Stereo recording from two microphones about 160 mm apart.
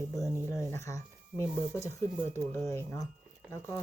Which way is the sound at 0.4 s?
20° left (ahead or behind).